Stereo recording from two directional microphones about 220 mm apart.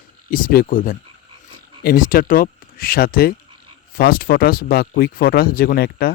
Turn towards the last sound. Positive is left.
turn(degrees=45)  # may be behind; listen again after turning